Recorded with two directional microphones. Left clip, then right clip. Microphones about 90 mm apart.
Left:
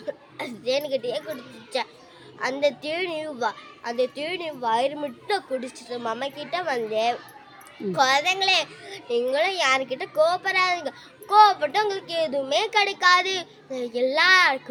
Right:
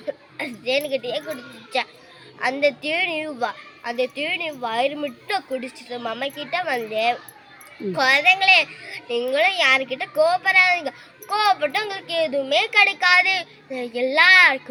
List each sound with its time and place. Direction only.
0.0 s a child's voice: 35° left (ahead or behind)